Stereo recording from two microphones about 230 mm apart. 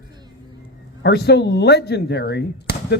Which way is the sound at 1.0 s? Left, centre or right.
Left.